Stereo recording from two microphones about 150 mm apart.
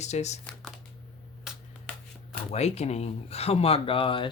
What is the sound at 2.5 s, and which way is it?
Speech, 45° left (ahead or behind).